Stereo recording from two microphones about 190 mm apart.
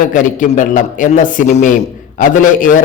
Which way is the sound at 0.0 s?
45° left (ahead or behind).